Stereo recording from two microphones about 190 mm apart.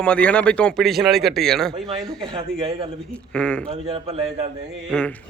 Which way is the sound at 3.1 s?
5° left (ahead or behind).